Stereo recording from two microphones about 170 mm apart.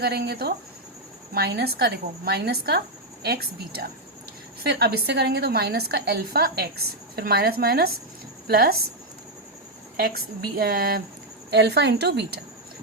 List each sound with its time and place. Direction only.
0.0 s a woman's voice: 70° right (ahead or behind)
10.0 s a woman's voice: 65° right (ahead or behind)
11.5 s a woman's voice: 80° right